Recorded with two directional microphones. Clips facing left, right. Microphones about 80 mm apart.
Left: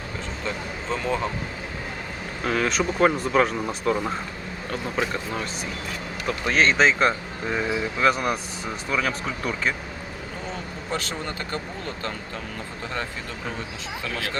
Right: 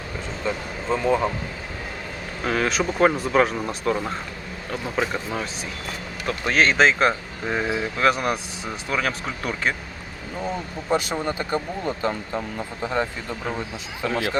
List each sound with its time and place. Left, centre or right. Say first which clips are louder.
0.4 s speech: right 4 dB; centre
2.4 s speech: right 1 dB; centre
10.9 s speech: right 7 dB; centre